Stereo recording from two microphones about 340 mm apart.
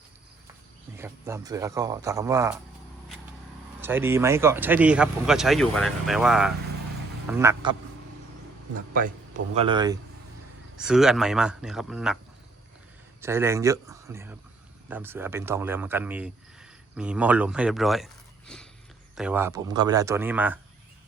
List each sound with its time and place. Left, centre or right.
0.9 s speech: centre
3.8 s speech: centre
8.9 s a man's voice: right
9.6 s speech: centre
13.2 s speech: centre